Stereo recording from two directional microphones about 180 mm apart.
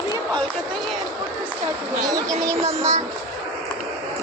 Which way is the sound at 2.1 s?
20° right (ahead or behind).